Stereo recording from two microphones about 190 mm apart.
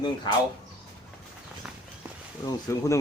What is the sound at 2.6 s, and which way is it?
Speech, 15° left (ahead or behind).